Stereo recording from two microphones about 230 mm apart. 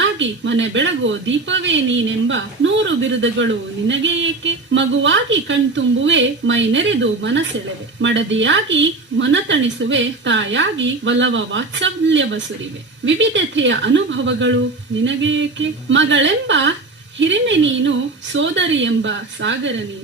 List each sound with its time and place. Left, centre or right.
0.0 s speech: right